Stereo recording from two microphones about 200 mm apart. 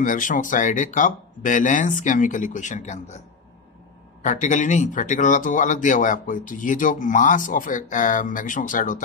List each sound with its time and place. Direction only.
0.0 s speech: 40° left (ahead or behind)
4.2 s speech: 40° left (ahead or behind)